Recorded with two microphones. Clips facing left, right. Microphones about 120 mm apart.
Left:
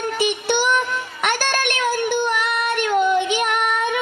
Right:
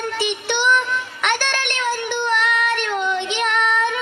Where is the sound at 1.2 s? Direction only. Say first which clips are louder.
Left 2 dB; 45° left (ahead or behind).